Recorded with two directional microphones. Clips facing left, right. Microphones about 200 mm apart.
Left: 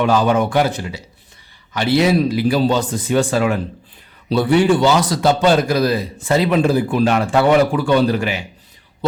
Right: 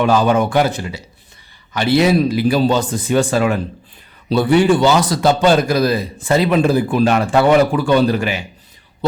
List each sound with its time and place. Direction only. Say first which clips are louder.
0.0 s speech: right 1 dB; 45° right (ahead or behind)